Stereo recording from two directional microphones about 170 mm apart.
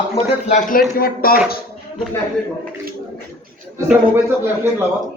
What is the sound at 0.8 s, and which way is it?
Speech, 60° left (ahead or behind).